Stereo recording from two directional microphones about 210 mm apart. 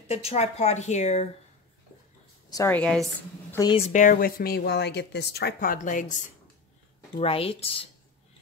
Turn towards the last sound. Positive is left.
turn(degrees=25)  # may be behind; listen again after turning